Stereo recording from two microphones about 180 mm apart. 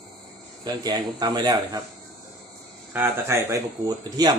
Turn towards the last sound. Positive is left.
turn(degrees=-20)  # may be behind; listen again after turning